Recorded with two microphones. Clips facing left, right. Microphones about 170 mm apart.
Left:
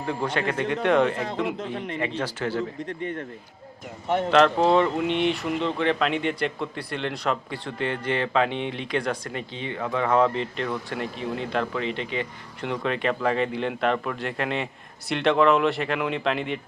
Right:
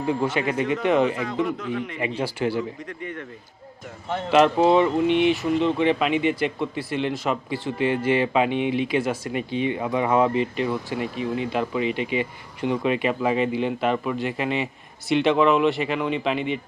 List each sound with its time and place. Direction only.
0.0 s speech: 5° right (ahead or behind)
1.5 s speech: 30° left (ahead or behind)
2.0 s speech: 10° right (ahead or behind)
2.8 s speech: 30° left (ahead or behind)
4.3 s speech: 10° right (ahead or behind)